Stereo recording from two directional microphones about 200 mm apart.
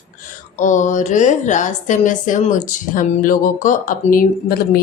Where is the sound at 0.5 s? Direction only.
40° left (ahead or behind).